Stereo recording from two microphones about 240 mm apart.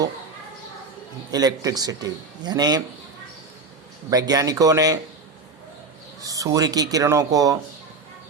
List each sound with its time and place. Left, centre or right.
1.3 s a man's voice: centre
4.1 s a man's voice: centre
6.2 s a man's voice: centre